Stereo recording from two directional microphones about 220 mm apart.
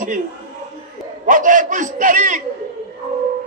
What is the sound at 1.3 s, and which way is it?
A man's voice, 35° right (ahead or behind).